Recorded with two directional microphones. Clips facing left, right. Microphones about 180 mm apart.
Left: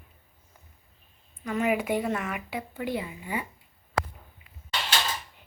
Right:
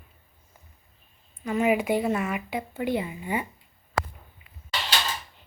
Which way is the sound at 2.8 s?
25° right (ahead or behind).